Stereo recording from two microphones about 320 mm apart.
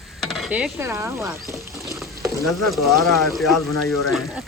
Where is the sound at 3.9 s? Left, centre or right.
Centre.